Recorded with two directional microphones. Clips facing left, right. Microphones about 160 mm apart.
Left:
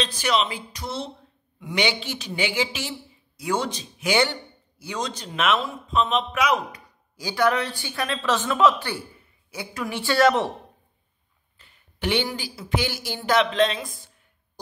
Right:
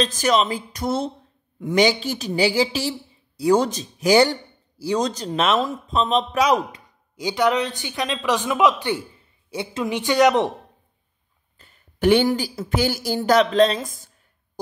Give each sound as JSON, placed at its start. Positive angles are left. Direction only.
{"t": 0.0, "sound": "speech", "side_deg": -45}
{"t": 7.2, "sound": "speech", "side_deg": -20}
{"t": 11.5, "sound": "a woman's voice", "side_deg": -45}